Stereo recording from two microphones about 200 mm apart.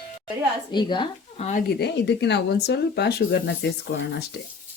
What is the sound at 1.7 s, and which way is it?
Speech, 55° left (ahead or behind).